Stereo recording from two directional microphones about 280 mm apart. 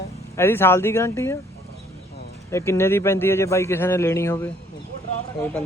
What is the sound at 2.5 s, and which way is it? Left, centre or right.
A man's voice, centre.